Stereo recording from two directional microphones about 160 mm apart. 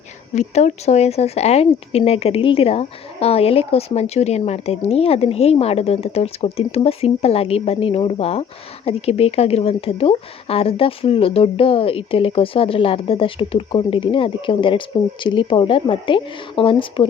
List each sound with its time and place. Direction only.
0.3 s speech: 45° left (ahead or behind)